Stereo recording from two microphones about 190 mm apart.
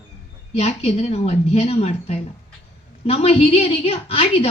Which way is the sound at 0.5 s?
35° left (ahead or behind).